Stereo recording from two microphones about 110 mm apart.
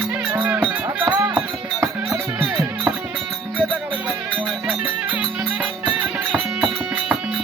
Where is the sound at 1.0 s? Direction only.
35° right (ahead or behind).